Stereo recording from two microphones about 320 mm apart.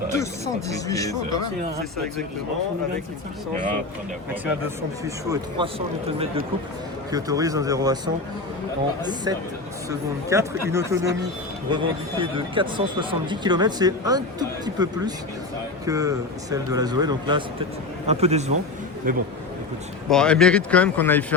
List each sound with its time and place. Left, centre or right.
0.2 s speech: centre
5.0 s speech: centre
7.1 s speech: centre
10.2 s a man's voice: centre; by 19.2 s right
20.1 s speech: centre